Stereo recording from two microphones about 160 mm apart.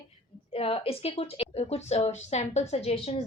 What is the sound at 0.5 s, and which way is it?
A woman's voice, 35° left (ahead or behind).